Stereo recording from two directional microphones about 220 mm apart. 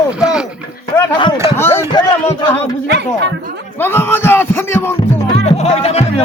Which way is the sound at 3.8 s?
10° left (ahead or behind).